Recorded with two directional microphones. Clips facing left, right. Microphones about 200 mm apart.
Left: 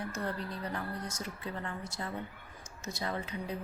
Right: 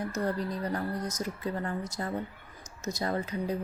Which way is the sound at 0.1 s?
40° right (ahead or behind).